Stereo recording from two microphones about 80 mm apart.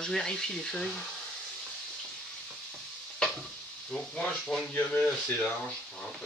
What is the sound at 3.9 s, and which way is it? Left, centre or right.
Speech, centre.